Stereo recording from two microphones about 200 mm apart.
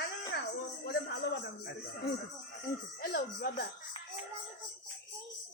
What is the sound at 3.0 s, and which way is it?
Speech, 50° left (ahead or behind).